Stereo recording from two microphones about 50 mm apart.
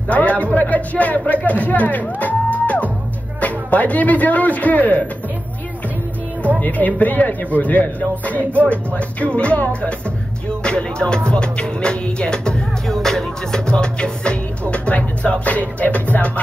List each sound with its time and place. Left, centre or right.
0.1 s music: left
0.6 s a man's voice: left
7.0 s speech: left
8.6 s music: left